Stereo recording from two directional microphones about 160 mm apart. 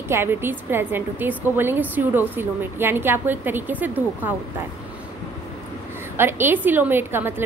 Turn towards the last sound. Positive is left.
turn(degrees=-15)  # may be behind; listen again after turning